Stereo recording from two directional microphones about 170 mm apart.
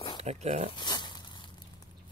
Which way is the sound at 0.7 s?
25° left (ahead or behind).